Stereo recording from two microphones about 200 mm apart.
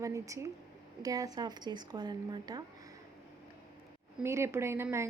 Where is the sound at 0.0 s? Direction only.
15° right (ahead or behind).